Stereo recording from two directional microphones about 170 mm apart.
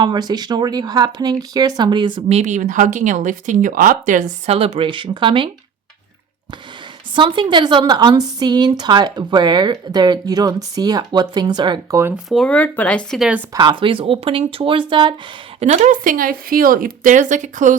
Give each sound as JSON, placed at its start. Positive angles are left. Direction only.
{"t": 0.0, "sound": "speech", "side_deg": -25}
{"t": 2.4, "sound": "speech", "side_deg": -45}
{"t": 7.2, "sound": "speech", "side_deg": -30}
{"t": 12.1, "sound": "speech", "side_deg": 0}
{"t": 13.5, "sound": "speech", "side_deg": -25}
{"t": 15.6, "sound": "speech", "side_deg": -40}